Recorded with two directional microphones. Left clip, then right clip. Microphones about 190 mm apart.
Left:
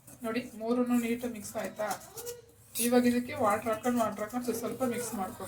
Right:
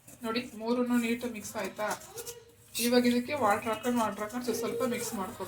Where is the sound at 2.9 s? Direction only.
20° right (ahead or behind).